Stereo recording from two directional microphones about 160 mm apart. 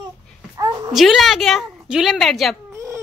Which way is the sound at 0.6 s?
25° right (ahead or behind).